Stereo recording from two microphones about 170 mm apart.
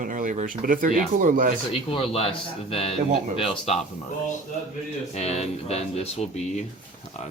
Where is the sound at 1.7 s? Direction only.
35° left (ahead or behind).